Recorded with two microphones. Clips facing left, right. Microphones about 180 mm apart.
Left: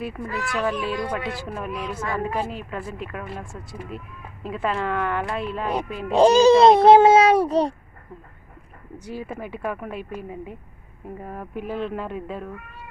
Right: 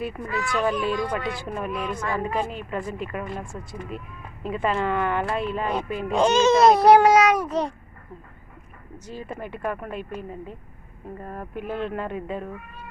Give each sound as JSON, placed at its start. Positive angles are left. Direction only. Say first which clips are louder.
{"t": 0.0, "sound": "speech", "louder": "right 1 dB", "side_deg": 0}
{"t": 6.1, "sound": "a child's voice", "louder": "left 5 dB", "side_deg": 35}
{"t": 9.0, "sound": "speech", "louder": "left 2 dB", "side_deg": 10}